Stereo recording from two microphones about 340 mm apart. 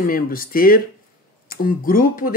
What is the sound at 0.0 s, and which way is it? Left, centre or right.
Speech, left.